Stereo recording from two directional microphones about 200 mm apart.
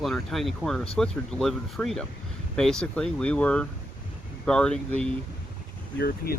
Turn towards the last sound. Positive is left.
turn(degrees=50)  # may be behind; listen again after turning